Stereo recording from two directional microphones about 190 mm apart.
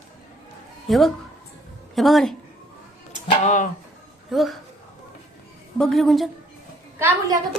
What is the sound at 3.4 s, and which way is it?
Speech, 40° left (ahead or behind).